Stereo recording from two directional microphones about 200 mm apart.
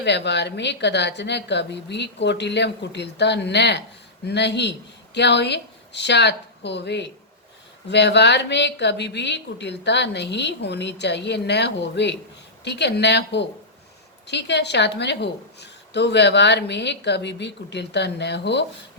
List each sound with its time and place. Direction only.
0.0 s a woman's voice: 60° left (ahead or behind)